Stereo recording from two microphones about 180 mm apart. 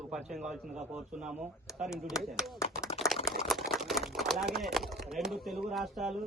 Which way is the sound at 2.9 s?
30° left (ahead or behind).